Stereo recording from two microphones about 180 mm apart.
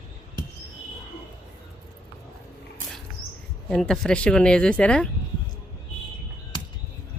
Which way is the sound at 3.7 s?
5° left (ahead or behind).